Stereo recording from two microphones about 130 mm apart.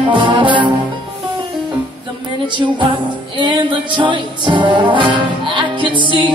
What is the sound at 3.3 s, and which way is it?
Music, 40° right (ahead or behind).